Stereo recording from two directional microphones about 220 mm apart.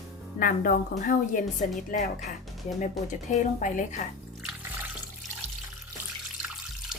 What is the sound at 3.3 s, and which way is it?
Speech, 35° left (ahead or behind).